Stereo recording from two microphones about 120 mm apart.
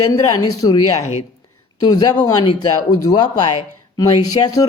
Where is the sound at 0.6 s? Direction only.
35° left (ahead or behind).